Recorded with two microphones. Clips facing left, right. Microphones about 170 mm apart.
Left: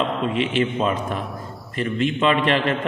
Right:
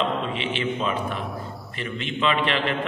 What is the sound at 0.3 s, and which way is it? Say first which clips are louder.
A man's voice: left 5 dB; 45° left (ahead or behind).